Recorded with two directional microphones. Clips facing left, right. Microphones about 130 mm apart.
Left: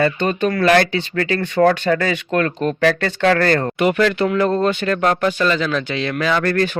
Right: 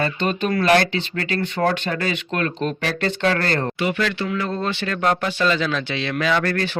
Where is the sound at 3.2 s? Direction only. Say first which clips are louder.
Left 7 dB; 45° left (ahead or behind).